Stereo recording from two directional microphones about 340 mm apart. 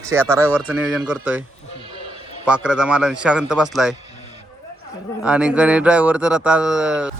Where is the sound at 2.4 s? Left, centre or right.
Centre.